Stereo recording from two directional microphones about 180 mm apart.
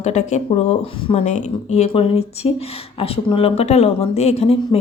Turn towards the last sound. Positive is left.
turn(degrees=35)  # may be behind; listen again after turning